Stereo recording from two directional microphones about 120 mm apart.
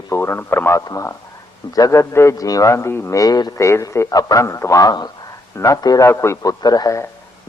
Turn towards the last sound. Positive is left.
turn(degrees=30)  # may be behind; listen again after turning